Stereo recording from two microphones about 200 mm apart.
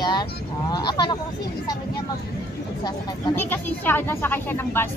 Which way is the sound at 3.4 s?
10° left (ahead or behind).